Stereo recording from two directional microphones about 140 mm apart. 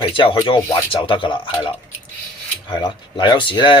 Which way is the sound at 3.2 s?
35° left (ahead or behind).